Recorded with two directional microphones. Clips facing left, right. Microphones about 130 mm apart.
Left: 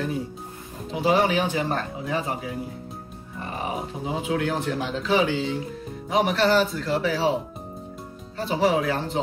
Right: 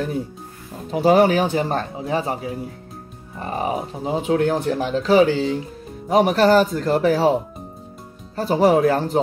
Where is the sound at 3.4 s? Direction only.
40° right (ahead or behind).